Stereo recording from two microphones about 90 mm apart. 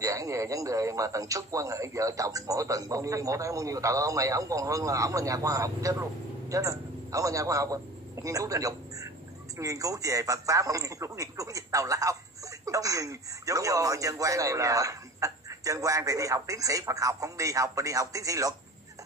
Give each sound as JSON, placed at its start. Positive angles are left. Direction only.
{"t": 0.0, "sound": "a man's voice", "side_deg": -35}